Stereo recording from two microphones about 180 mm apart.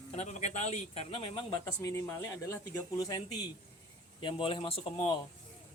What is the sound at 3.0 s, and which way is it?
Speech, 20° left (ahead or behind).